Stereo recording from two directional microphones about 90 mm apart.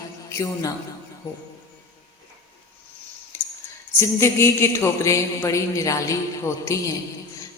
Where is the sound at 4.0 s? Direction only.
30° left (ahead or behind).